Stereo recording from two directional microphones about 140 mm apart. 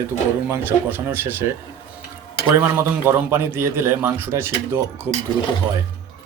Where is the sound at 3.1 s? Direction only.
15° right (ahead or behind).